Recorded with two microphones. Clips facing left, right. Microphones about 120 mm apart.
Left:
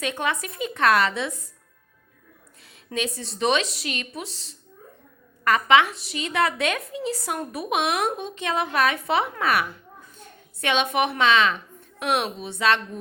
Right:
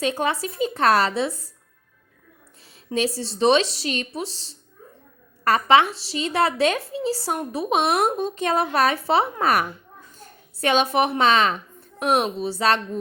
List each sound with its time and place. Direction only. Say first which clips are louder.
0.0 s a woman's voice: right 4 dB; 35° right (ahead or behind)
2.9 s a woman's voice: right 5 dB; 35° right (ahead or behind)
10.2 s a sound: right 6 dB; 40° right (ahead or behind)
11.2 s a woman's voice: right 1 dB; 40° right (ahead or behind)